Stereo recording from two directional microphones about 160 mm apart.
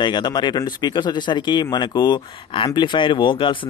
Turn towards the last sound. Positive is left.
turn(degrees=30)  # may be behind; listen again after turning